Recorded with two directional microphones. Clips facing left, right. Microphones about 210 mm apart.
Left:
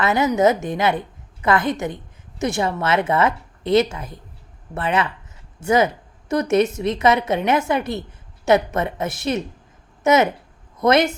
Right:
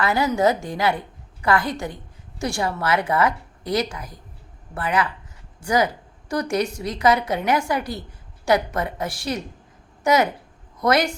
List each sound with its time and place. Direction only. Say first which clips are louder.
0.0 s a woman's voice: left 3 dB; 20° left (ahead or behind)